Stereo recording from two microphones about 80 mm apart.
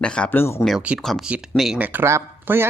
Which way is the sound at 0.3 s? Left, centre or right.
Left.